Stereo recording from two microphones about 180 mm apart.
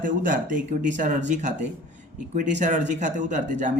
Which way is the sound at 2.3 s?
40° right (ahead or behind).